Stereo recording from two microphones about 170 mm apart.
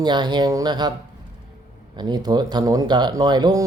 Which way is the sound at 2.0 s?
25° right (ahead or behind).